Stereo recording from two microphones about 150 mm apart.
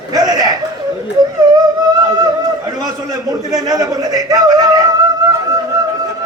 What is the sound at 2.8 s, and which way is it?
A man's voice, 25° right (ahead or behind).